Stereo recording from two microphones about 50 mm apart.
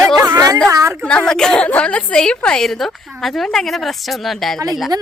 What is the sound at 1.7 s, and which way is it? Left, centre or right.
Speech, left.